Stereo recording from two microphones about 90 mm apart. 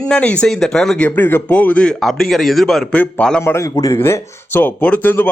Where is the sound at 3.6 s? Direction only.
40° left (ahead or behind).